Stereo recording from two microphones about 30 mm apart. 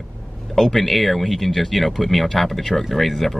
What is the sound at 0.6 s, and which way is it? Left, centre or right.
Speech, centre.